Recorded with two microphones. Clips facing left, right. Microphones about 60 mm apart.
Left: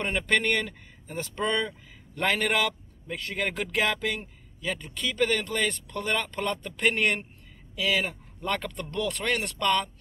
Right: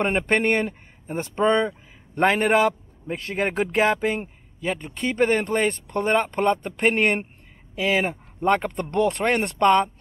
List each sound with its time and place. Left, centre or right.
0.0 s speech: right